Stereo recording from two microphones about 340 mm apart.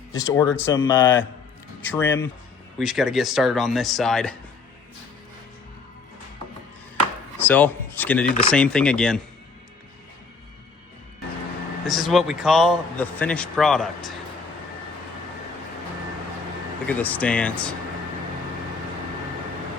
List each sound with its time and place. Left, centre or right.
0.1 s a man's voice: centre
7.3 s a sound: centre
8.4 s a man's voice: centre
11.9 s a man's voice: centre
16.8 s a man's voice: centre